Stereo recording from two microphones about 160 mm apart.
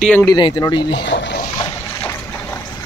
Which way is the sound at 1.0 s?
90° left.